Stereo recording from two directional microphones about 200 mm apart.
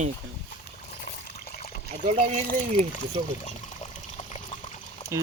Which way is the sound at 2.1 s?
35° right (ahead or behind).